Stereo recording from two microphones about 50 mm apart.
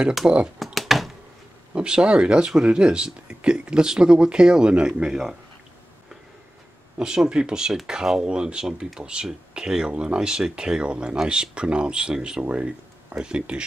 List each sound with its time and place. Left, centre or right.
0.2 s speech: right
0.7 s a sound: centre
1.8 s speech: centre
7.0 s speech: centre